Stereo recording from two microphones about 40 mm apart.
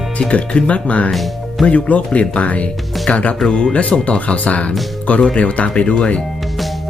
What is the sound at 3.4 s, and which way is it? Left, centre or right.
Speech, centre.